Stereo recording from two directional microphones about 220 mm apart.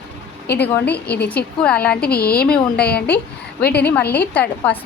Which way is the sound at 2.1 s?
45° left (ahead or behind).